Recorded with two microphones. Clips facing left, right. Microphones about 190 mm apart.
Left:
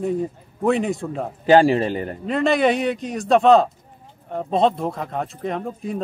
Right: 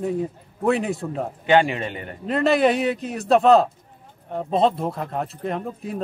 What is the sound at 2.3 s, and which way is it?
A man's voice, centre (ahead or behind).